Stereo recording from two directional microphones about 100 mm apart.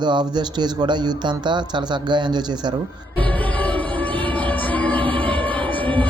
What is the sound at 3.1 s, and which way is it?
Music, 15° left (ahead or behind).